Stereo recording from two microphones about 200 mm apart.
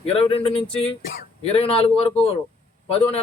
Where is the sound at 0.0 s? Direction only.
30° left (ahead or behind).